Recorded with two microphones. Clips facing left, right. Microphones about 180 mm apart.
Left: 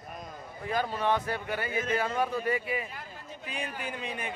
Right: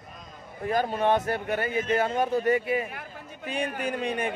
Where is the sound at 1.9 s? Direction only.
25° right (ahead or behind).